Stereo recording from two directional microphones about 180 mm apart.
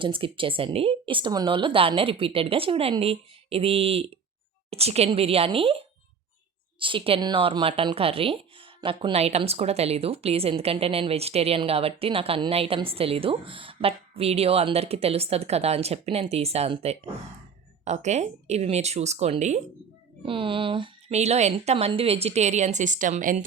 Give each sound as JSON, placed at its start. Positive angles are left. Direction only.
{"t": 0.0, "sound": "a woman's voice", "side_deg": -30}
{"t": 6.7, "sound": "a woman's voice", "side_deg": -30}
{"t": 20.2, "sound": "a woman's voice", "side_deg": -30}